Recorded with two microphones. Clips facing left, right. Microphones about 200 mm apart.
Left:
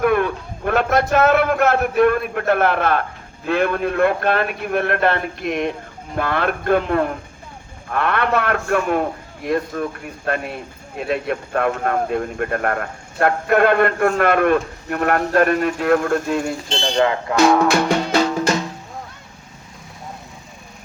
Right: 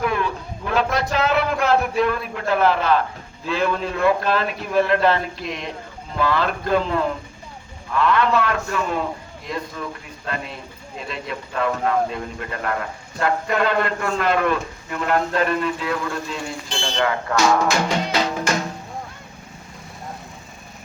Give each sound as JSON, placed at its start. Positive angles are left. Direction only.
{"t": 0.0, "sound": "a man's voice", "side_deg": 55}
{"t": 16.9, "sound": "speech", "side_deg": 20}
{"t": 17.3, "sound": "music", "side_deg": 55}